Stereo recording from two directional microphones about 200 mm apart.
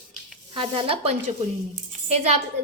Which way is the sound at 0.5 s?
25° right (ahead or behind).